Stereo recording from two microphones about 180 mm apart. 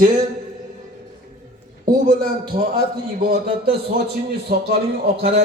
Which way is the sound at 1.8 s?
55° right (ahead or behind).